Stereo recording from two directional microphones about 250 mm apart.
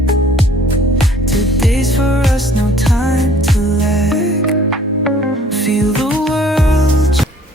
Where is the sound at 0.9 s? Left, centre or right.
Centre.